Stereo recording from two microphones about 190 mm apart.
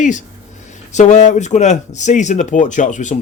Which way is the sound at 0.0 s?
40° left (ahead or behind).